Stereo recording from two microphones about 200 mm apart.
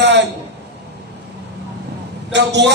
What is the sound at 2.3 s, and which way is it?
Speech, 60° right (ahead or behind).